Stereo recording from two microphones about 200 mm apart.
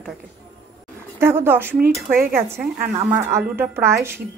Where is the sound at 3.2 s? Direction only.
10° right (ahead or behind).